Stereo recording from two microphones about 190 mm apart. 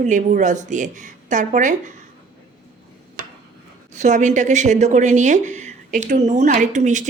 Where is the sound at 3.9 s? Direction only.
40° right (ahead or behind).